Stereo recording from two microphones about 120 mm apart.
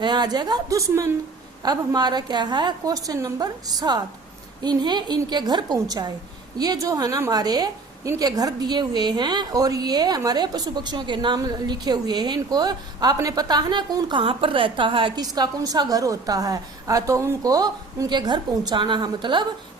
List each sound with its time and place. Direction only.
0.0 s a woman's voice: 35° right (ahead or behind)
15.2 s a woman's voice: 30° right (ahead or behind)